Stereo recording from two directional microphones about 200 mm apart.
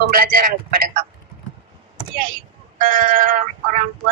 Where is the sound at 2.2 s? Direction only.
45° right (ahead or behind).